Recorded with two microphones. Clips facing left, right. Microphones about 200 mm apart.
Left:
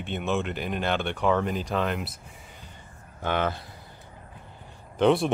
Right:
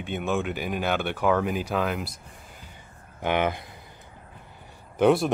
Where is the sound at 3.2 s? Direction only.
15° right (ahead or behind).